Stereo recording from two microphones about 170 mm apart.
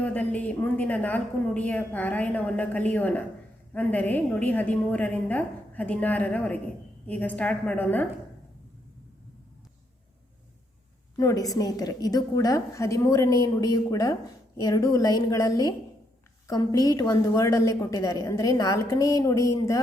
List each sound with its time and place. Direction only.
0.0 s a woman's voice: 10° left (ahead or behind)
11.2 s a woman's voice: 20° left (ahead or behind)